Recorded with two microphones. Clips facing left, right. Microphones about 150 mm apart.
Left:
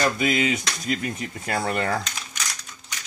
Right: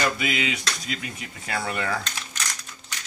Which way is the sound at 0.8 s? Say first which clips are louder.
Left 7 dB; 45° left (ahead or behind).